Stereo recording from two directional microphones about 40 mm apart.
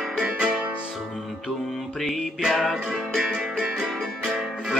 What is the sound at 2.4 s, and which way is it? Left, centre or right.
Music, centre.